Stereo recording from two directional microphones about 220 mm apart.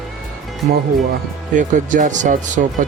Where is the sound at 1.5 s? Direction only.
35° right (ahead or behind).